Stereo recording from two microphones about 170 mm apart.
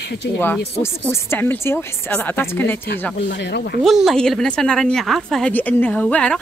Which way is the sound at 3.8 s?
Centre (ahead or behind).